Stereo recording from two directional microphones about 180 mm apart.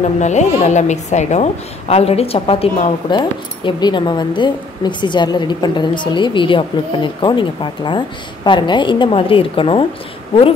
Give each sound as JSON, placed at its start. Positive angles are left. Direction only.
{"t": 0.2, "sound": "a woman's voice", "side_deg": 40}